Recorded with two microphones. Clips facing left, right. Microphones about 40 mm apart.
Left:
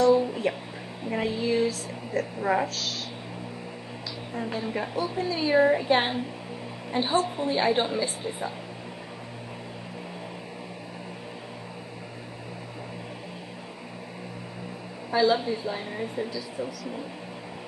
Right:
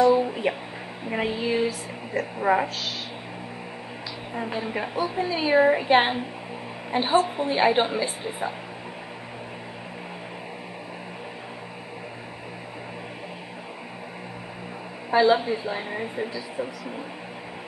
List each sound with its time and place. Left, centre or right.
0.0 s a sound: centre
1.0 s speech: right
4.3 s a woman's voice: centre
15.0 s a woman's voice: right